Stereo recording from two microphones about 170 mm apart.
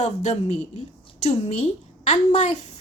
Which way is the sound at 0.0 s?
40° left (ahead or behind).